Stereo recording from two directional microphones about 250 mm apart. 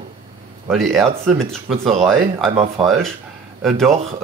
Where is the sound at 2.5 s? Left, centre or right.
Right.